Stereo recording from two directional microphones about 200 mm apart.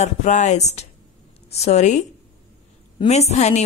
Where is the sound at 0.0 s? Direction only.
35° left (ahead or behind).